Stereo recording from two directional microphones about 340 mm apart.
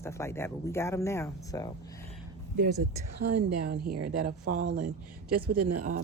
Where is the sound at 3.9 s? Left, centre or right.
Right.